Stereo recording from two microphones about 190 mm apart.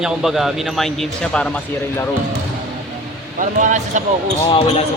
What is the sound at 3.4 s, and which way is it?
Speech, 40° right (ahead or behind).